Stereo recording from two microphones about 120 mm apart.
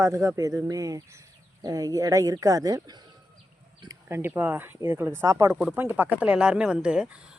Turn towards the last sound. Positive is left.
turn(degrees=-10)  # may be behind; listen again after turning